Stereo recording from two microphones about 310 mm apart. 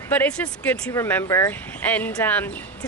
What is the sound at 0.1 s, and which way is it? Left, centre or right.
Speech, centre.